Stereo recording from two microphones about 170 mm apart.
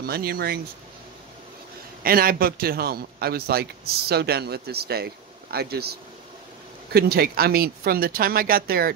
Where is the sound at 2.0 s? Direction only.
60° right (ahead or behind).